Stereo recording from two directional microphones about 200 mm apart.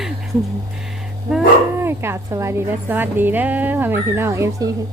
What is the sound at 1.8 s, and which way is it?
A woman's voice, 10° right (ahead or behind).